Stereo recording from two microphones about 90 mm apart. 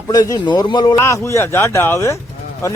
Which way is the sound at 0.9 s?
30° left (ahead or behind).